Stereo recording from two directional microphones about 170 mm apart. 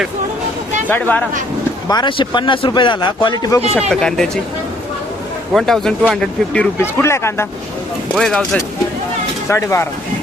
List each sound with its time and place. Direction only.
0.9 s speech: 10° left (ahead or behind)
1.9 s a man's voice: 25° left (ahead or behind)
3.8 s speech: 5° left (ahead or behind)
5.5 s speech: centre (ahead or behind)
7.0 s speech: 15° left (ahead or behind)
8.1 s speech: centre (ahead or behind)
9.5 s speech: 15° left (ahead or behind)